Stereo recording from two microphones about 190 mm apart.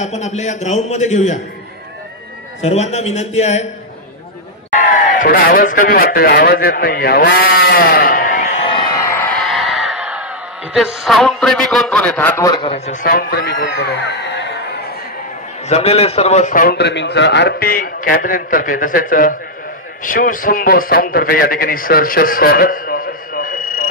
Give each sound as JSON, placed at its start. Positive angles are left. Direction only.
{"t": 0.0, "sound": "a man's voice", "side_deg": 35}
{"t": 2.6, "sound": "a man's voice", "side_deg": 35}
{"t": 5.2, "sound": "a man's voice", "side_deg": 50}
{"t": 8.9, "sound": "a sound", "side_deg": 15}
{"t": 10.7, "sound": "a man's voice", "side_deg": 0}
{"t": 13.0, "sound": "a man's voice", "side_deg": 55}
{"t": 15.7, "sound": "a man's voice", "side_deg": 35}